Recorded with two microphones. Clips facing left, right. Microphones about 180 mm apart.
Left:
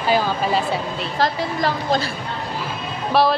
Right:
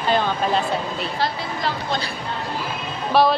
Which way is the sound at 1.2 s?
45° left (ahead or behind).